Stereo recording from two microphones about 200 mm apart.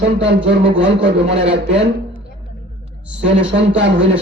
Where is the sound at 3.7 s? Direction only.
60° right (ahead or behind).